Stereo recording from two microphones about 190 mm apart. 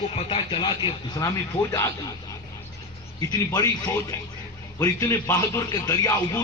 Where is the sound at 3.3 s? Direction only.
20° left (ahead or behind).